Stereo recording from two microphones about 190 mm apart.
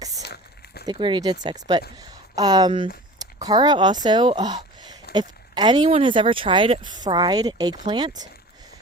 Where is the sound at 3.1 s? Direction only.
20° right (ahead or behind).